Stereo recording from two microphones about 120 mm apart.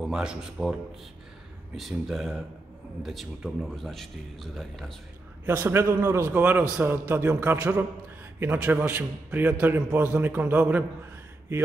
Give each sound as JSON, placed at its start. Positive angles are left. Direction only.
{"t": 0.0, "sound": "a man's voice", "side_deg": -5}
{"t": 1.8, "sound": "a man's voice", "side_deg": 0}
{"t": 5.4, "sound": "a man's voice", "side_deg": -15}